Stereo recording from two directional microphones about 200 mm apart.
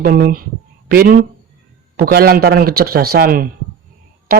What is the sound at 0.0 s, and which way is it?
A woman's voice, 45° right (ahead or behind).